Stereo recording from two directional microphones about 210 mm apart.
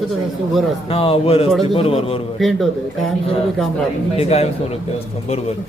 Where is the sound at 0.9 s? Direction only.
25° left (ahead or behind).